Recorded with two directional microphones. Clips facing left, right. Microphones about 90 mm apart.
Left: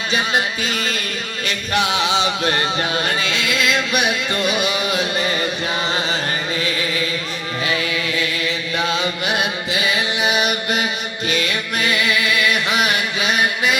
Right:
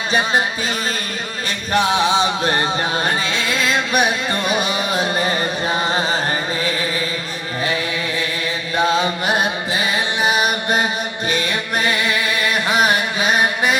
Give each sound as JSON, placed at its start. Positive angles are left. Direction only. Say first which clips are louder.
{"t": 0.1, "sound": "music", "louder": "right 2 dB", "side_deg": -35}
{"t": 1.5, "sound": "music", "louder": "right 3 dB", "side_deg": -35}
{"t": 5.9, "sound": "chant", "louder": "right 2 dB", "side_deg": -35}
{"t": 8.7, "sound": "chant", "louder": "right 6 dB", "side_deg": -35}
{"t": 11.3, "sound": "music", "louder": "even", "side_deg": -35}